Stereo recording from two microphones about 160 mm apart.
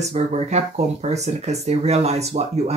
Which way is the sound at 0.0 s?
45° right (ahead or behind).